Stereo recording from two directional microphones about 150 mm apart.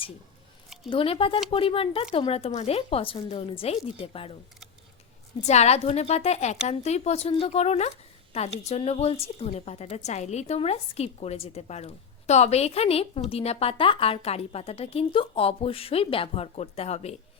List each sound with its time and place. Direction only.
0.9 s speech: 40° left (ahead or behind)
5.4 s a woman's voice: 45° left (ahead or behind)